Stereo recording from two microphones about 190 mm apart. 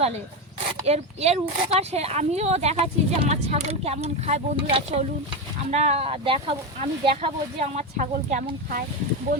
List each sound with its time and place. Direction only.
0.9 s speech: 35° right (ahead or behind)